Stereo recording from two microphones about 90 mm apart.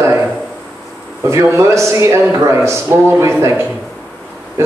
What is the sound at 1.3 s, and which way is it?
A man's voice, 35° right (ahead or behind).